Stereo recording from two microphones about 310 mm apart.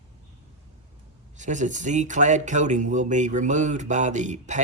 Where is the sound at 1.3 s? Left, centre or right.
Right.